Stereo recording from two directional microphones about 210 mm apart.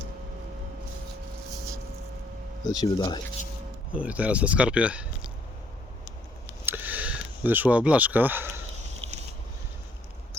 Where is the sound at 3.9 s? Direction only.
5° right (ahead or behind).